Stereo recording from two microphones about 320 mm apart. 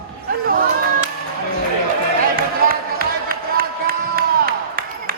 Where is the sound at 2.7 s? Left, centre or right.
Right.